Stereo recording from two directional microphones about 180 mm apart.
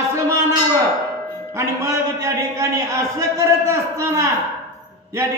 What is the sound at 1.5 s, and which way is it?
A man's voice, 15° right (ahead or behind).